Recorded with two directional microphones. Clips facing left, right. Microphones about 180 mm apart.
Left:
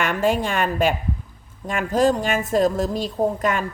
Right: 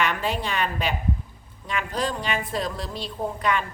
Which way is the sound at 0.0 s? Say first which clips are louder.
Left 5 dB; 45° left (ahead or behind).